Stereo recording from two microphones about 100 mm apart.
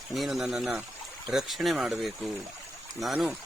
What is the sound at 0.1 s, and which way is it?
Speech, centre (ahead or behind).